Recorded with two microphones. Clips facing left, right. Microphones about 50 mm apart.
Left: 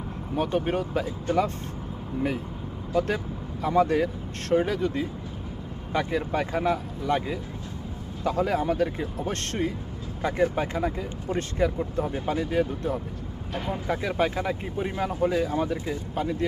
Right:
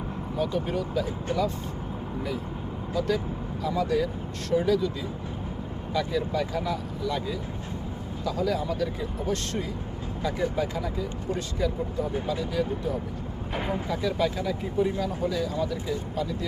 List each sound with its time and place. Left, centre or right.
0.3 s speech: left
3.6 s speech: left